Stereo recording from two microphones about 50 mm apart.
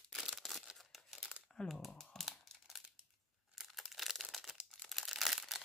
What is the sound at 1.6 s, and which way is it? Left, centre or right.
Speech, centre.